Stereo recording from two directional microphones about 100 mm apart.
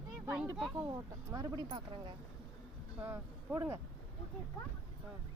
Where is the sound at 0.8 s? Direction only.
40° right (ahead or behind).